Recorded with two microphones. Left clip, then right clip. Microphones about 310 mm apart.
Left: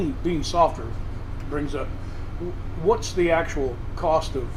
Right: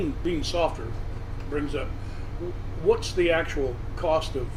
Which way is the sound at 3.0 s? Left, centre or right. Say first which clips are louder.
Left 2 dB; left.